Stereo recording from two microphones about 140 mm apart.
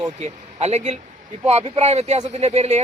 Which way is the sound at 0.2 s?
55° right (ahead or behind).